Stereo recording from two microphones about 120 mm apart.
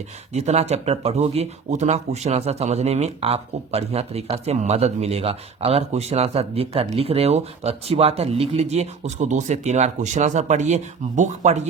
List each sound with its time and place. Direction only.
0.3 s speech: 70° right (ahead or behind)